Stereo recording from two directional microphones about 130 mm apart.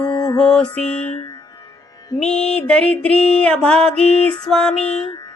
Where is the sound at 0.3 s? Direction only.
5° left (ahead or behind).